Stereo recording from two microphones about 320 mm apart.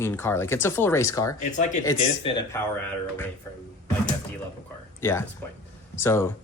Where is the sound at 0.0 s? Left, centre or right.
Centre.